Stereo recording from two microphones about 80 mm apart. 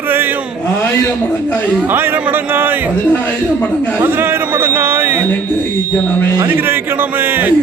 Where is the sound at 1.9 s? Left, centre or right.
Right.